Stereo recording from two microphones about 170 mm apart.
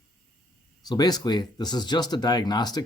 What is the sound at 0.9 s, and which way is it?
Speech, 25° left (ahead or behind).